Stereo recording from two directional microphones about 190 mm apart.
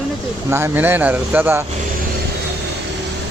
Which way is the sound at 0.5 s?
10° right (ahead or behind).